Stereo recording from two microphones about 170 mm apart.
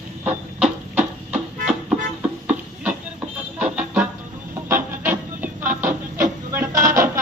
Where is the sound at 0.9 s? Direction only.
5° right (ahead or behind).